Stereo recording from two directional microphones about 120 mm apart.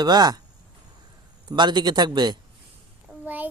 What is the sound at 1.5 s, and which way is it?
Speech, 40° right (ahead or behind).